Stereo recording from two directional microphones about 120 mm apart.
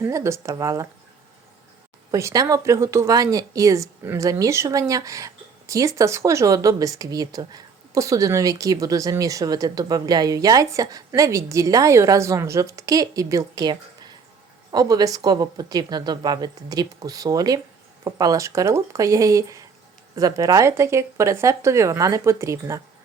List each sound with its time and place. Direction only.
0.0 s a woman's voice: 25° right (ahead or behind)
2.0 s a woman's voice: 25° right (ahead or behind)